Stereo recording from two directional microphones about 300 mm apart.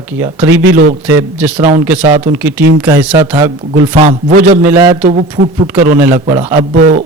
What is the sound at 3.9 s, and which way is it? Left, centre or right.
Speech, right.